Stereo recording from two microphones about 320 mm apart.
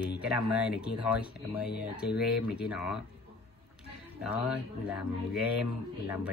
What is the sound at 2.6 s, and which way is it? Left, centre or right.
Speech, centre.